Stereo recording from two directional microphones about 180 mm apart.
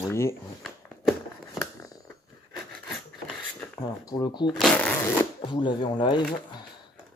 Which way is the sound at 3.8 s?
25° left (ahead or behind).